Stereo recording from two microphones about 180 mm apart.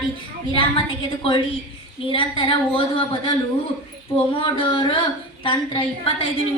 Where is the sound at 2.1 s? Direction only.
30° left (ahead or behind).